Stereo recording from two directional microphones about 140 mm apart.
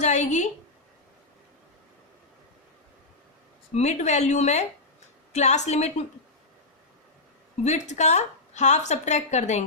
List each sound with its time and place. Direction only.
0.0 s a woman's voice: 55° left (ahead or behind)
3.8 s a woman's voice: 55° left (ahead or behind)
7.6 s a woman's voice: 55° left (ahead or behind)